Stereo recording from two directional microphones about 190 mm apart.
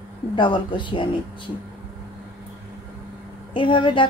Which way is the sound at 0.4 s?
25° left (ahead or behind).